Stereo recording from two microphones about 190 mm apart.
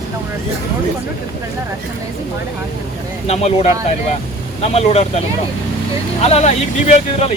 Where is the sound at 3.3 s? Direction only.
35° left (ahead or behind).